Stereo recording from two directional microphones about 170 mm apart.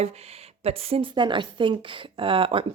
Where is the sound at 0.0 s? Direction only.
40° right (ahead or behind).